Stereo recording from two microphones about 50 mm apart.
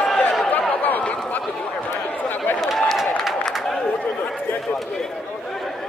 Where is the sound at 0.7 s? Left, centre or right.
Left.